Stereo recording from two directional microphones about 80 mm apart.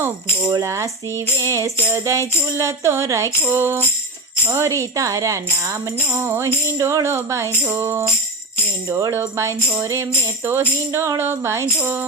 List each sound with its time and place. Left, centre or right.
0.6 s tambourine: right
3.4 s music: right
4.4 s speech: right
6.1 s tambourine: right
8.9 s speech: right
9.3 s tambourine: right
11.8 s music: right